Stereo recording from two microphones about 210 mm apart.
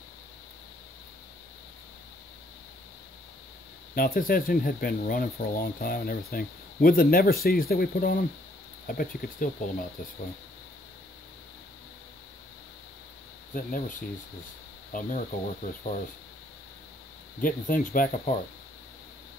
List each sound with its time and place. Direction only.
3.9 s speech: 45° left (ahead or behind)
13.7 s speech: 40° left (ahead or behind)
17.4 s speech: 40° left (ahead or behind)